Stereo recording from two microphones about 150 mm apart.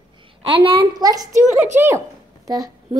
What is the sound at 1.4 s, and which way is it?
Speech, 55° right (ahead or behind).